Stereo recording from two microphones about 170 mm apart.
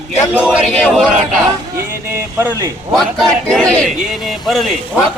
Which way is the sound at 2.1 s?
15° right (ahead or behind).